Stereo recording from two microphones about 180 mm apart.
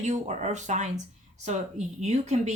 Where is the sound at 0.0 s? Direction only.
40° right (ahead or behind).